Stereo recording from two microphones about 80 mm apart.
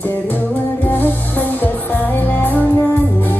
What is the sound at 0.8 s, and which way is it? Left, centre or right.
Music, left.